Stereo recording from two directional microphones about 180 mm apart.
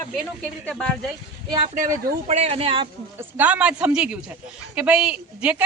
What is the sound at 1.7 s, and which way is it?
Speech, 45° right (ahead or behind).